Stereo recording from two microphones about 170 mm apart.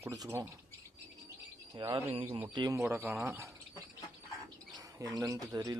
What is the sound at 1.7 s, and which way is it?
Speech, 25° right (ahead or behind).